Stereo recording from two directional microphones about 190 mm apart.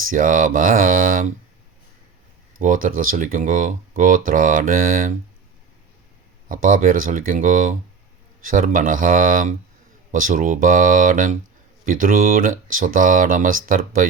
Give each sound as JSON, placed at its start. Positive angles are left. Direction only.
{"t": 0.1, "sound": "speech", "side_deg": -45}
{"t": 2.6, "sound": "speech", "side_deg": -45}
{"t": 6.5, "sound": "speech", "side_deg": -45}